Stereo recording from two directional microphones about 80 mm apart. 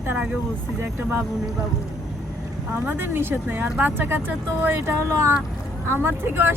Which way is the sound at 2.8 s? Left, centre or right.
Right.